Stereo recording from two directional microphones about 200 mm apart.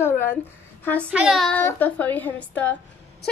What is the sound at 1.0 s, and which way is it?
Speech, 5° right (ahead or behind).